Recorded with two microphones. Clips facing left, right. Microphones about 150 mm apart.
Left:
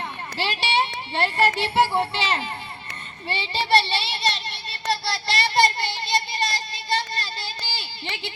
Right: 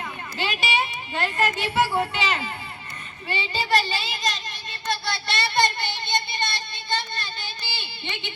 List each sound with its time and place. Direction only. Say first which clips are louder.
0.3 s a child's voice: left 2 dB; 30° left (ahead or behind)
3.2 s child singing: left 1 dB; 30° left (ahead or behind)